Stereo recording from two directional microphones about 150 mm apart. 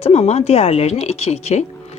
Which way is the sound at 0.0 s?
45° left (ahead or behind).